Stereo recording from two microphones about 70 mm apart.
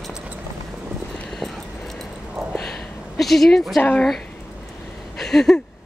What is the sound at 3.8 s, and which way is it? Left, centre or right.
Speech, centre.